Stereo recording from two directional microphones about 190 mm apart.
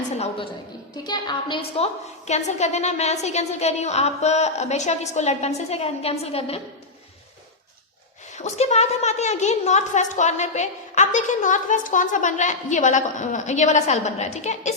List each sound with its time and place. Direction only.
1.0 s a woman's voice: 25° left (ahead or behind)
8.4 s a woman's voice: 35° left (ahead or behind)